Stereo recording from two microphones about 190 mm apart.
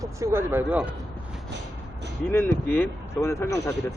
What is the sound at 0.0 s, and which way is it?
Speech, 15° right (ahead or behind).